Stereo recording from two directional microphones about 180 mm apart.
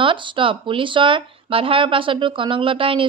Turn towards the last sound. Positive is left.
turn(degrees=-30)  # may be behind; listen again after turning